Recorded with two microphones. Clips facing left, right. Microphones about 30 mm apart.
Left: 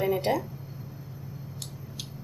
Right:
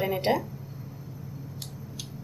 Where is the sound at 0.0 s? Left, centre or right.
Right.